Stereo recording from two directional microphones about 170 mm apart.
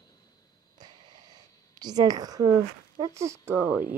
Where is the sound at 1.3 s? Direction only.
25° right (ahead or behind).